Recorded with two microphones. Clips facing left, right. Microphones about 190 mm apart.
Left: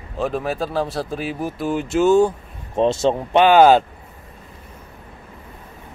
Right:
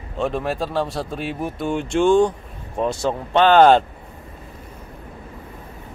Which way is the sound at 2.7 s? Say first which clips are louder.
Left 5 dB; 25° left (ahead or behind).